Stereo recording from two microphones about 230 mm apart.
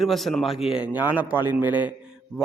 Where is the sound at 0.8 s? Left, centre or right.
Centre.